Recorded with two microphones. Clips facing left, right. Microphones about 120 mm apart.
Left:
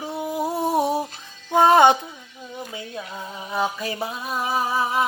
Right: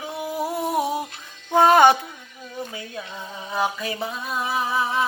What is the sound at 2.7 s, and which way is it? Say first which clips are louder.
Speech: left 1 dB; 25° left (ahead or behind).